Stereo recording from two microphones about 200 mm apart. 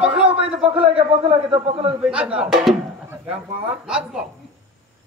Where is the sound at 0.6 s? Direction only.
25° right (ahead or behind).